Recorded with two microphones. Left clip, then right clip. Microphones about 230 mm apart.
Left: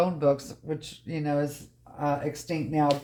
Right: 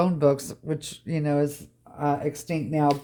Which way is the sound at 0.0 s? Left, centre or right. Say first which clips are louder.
Right 2 dB; right.